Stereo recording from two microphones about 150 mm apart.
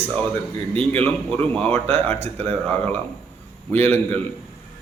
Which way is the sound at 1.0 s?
10° left (ahead or behind).